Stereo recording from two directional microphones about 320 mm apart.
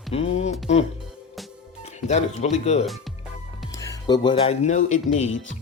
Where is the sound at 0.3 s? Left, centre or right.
Left.